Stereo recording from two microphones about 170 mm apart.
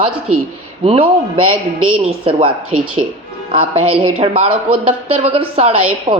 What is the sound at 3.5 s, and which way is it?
A woman's voice, 35° right (ahead or behind).